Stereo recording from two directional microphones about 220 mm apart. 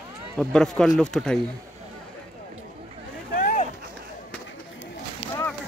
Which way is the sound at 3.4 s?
40° left (ahead or behind).